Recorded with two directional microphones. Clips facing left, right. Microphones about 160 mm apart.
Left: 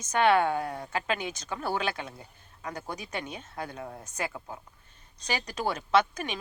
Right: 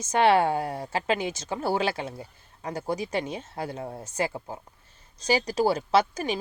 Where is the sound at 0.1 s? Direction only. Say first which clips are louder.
Right 3 dB; 35° right (ahead or behind).